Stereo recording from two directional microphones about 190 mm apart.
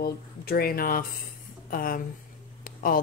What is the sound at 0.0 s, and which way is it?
Speech, 55° left (ahead or behind).